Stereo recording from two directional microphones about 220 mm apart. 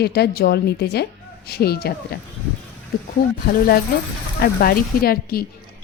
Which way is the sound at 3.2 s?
40° left (ahead or behind).